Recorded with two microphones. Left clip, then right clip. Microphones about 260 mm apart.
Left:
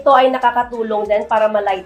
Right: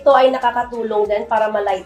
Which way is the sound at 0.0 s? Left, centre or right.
Left.